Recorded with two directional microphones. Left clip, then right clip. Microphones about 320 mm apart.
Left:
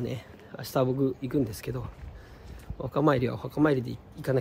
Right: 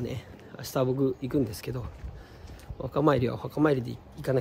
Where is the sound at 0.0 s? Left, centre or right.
Centre.